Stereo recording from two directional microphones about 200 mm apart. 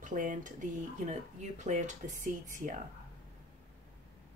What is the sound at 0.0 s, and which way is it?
Speech, 40° right (ahead or behind).